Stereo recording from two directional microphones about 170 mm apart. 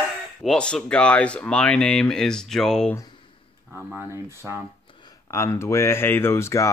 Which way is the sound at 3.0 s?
30° left (ahead or behind).